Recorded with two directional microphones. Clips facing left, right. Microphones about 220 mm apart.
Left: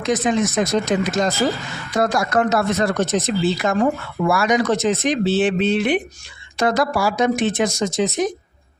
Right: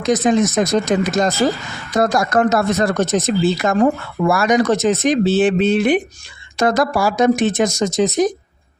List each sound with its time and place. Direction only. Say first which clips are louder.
0.0 s speech: right 4 dB; 40° right (ahead or behind)